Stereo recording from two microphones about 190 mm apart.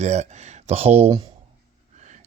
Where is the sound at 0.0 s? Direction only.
35° right (ahead or behind).